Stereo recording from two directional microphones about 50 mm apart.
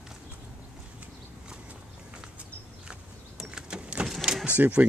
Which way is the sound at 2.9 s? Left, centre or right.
Centre.